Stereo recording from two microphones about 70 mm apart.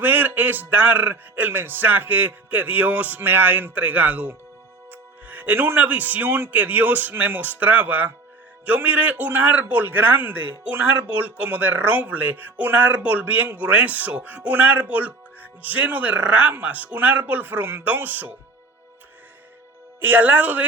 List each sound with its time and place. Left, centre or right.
0.0 s a man's voice: right
20.0 s a man's voice: right